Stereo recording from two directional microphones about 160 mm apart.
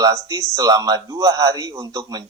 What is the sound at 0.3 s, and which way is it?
A man's voice, 20° right (ahead or behind).